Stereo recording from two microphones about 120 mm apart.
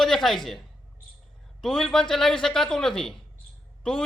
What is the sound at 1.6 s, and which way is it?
Speech, centre (ahead or behind).